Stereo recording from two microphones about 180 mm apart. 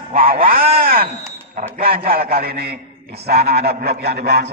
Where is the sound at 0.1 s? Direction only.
55° right (ahead or behind).